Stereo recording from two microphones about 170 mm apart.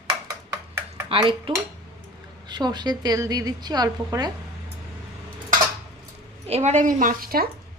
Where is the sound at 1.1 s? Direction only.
30° right (ahead or behind).